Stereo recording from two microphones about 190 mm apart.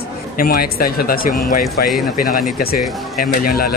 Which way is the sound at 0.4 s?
55° left (ahead or behind).